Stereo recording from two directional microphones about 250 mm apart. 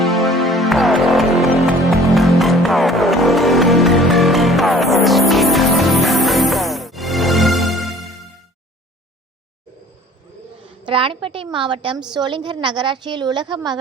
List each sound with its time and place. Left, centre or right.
0.0 s music: centre
10.8 s a woman's voice: right